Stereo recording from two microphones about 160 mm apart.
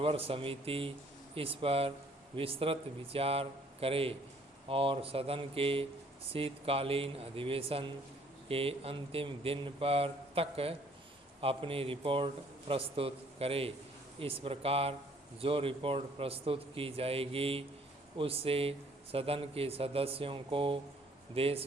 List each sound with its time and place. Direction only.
0.0 s speech: 35° right (ahead or behind)